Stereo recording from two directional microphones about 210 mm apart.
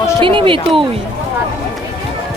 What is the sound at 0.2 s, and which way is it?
Speech, 25° right (ahead or behind).